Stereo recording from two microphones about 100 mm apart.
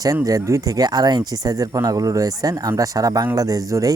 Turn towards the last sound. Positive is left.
turn(degrees=-35)  # may be behind; listen again after turning